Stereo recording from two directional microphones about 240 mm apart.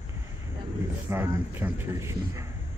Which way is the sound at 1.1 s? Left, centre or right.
Centre.